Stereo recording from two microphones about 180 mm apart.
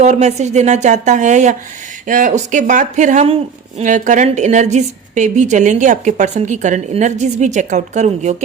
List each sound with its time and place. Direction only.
0.0 s a woman's voice: 40° right (ahead or behind)